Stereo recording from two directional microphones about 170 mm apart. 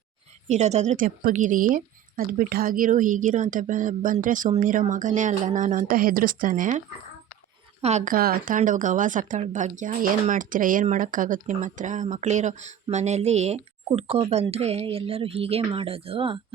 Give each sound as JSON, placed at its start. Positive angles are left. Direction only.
{"t": 0.4, "sound": "a woman's voice", "side_deg": -40}
{"t": 8.1, "sound": "a woman's voice", "side_deg": -60}